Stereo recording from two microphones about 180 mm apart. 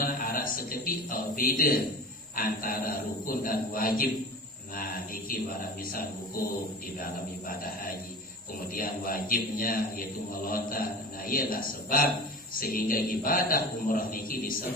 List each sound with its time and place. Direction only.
0.0 s a sound: 55° left (ahead or behind)
2.3 s a man's voice: 55° left (ahead or behind)
5.3 s a man's voice: 55° left (ahead or behind)
8.7 s a man's voice: 55° left (ahead or behind)